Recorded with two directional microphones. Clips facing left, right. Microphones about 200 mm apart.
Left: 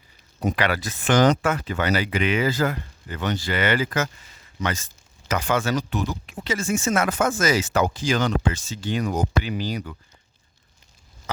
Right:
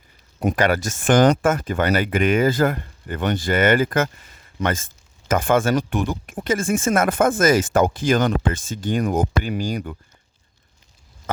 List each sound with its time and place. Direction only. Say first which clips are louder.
0.3 s speech: right 4 dB; 50° right (ahead or behind)